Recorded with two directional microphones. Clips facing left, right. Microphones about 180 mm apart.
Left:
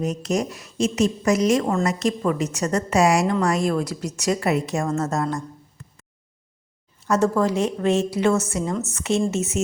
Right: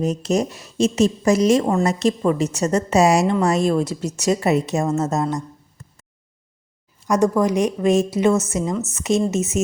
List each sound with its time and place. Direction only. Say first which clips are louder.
0.0 s a woman's voice: right 3 dB; 25° right (ahead or behind)
7.1 s a woman's voice: right 2 dB; 15° right (ahead or behind)